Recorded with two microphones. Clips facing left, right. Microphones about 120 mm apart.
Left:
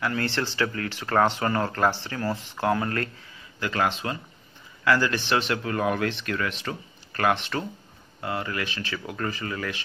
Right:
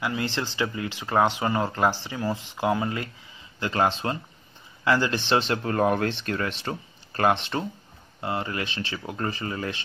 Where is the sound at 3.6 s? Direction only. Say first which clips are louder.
Right 2 dB; 30° right (ahead or behind).